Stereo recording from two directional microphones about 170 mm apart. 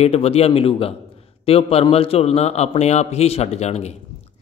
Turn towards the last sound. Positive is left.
turn(degrees=40)  # may be behind; listen again after turning